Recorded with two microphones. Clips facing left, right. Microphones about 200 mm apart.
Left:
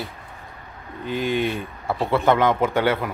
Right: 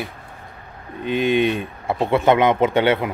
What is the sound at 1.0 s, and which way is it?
Speech, 20° right (ahead or behind).